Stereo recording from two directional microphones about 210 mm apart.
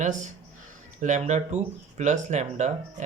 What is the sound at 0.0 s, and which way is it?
Speech, 35° right (ahead or behind).